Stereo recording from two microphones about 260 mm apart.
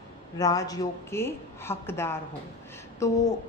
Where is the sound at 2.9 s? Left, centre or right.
Centre.